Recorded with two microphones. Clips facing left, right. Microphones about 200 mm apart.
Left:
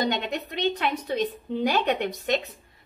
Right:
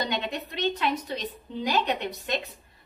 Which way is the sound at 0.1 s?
55° left (ahead or behind).